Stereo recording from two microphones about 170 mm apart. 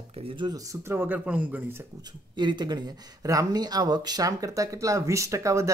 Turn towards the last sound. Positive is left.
turn(degrees=-20)  # may be behind; listen again after turning